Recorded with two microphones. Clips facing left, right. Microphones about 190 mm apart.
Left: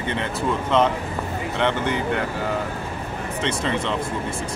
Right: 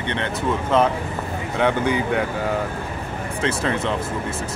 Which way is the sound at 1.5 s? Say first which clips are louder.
Right 3 dB; 10° right (ahead or behind).